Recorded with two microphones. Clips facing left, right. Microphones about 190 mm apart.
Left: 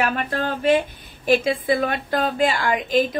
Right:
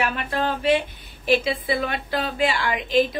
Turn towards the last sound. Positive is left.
turn(degrees=45)  # may be behind; listen again after turning